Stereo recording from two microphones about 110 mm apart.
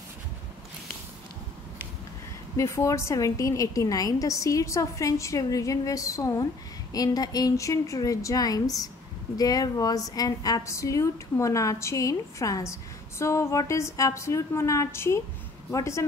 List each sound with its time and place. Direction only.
2.5 s a woman's voice: 30° left (ahead or behind)